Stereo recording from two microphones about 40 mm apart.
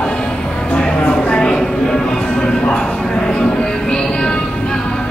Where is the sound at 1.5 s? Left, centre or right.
Centre.